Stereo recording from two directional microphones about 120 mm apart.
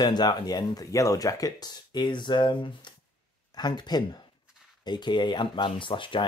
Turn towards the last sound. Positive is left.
turn(degrees=45)  # may be behind; listen again after turning